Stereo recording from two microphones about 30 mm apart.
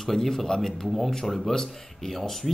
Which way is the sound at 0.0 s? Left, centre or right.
Centre.